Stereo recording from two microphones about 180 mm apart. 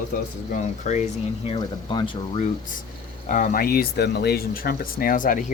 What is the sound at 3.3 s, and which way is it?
Speech, 45° left (ahead or behind).